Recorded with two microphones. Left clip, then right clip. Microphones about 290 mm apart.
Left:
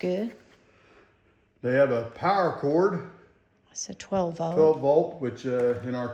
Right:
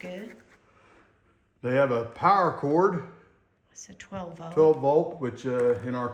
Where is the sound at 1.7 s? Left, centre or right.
Right.